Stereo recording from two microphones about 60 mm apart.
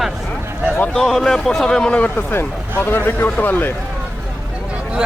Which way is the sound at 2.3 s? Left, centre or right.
Left.